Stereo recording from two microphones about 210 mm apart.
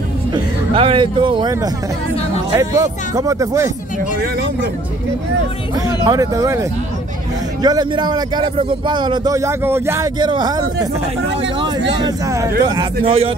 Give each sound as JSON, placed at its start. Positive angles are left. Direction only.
{"t": 0.3, "sound": "speech", "side_deg": -25}
{"t": 6.0, "sound": "speech", "side_deg": -15}
{"t": 7.6, "sound": "speech", "side_deg": -20}
{"t": 12.0, "sound": "speech", "side_deg": -15}